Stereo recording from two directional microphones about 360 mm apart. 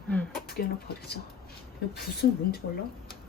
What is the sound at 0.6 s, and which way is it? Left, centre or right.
Speech, left.